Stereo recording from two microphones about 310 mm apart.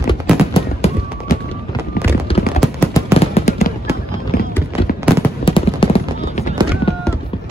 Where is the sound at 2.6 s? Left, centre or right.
Centre.